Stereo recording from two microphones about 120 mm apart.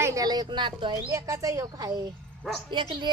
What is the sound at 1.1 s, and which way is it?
A woman's voice, 25° right (ahead or behind).